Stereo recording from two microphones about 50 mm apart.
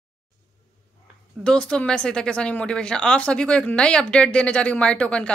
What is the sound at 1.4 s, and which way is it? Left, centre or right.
Speech, centre.